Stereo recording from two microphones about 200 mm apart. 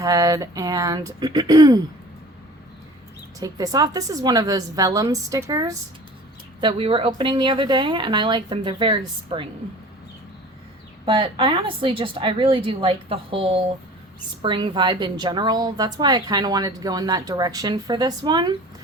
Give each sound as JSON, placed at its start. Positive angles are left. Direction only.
{"t": 0.0, "sound": "a woman's voice", "side_deg": -15}
{"t": 3.4, "sound": "a woman's voice", "side_deg": -20}
{"t": 11.0, "sound": "a woman's voice", "side_deg": -25}